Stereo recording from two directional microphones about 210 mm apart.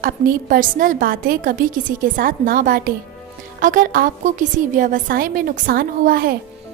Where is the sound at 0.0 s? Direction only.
45° right (ahead or behind).